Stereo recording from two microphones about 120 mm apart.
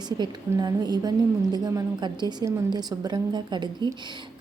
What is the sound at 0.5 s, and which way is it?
Speech, 35° right (ahead or behind).